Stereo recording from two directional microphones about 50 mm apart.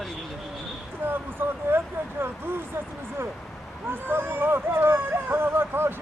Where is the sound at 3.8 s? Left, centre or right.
Right.